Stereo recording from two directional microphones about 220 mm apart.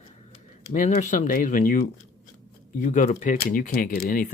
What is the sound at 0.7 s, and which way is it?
Speech, 35° left (ahead or behind).